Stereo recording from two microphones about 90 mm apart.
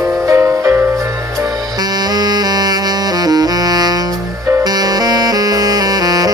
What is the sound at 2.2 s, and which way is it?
Music, 45° right (ahead or behind).